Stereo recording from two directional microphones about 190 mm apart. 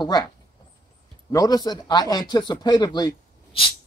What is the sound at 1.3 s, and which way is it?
Speech, 20° left (ahead or behind).